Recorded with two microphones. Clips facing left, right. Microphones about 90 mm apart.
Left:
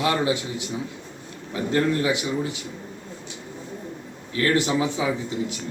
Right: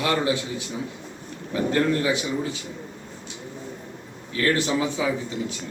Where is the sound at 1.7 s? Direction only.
15° left (ahead or behind).